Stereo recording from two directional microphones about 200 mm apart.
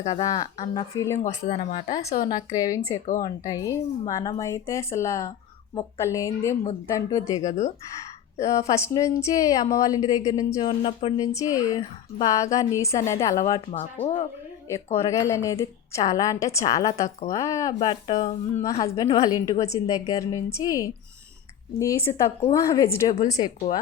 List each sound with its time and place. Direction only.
0.1 s a woman's voice: 20° left (ahead or behind)
1.2 s speech: 35° left (ahead or behind)
2.3 s a woman's voice: 15° left (ahead or behind)
7.4 s speech: 35° left (ahead or behind)
8.4 s a woman's voice: 15° left (ahead or behind)
14.0 s speech: 30° left (ahead or behind)
14.9 s a woman's voice: 15° left (ahead or behind)
18.0 s speech: 30° left (ahead or behind)
18.6 s a woman's voice: 15° left (ahead or behind)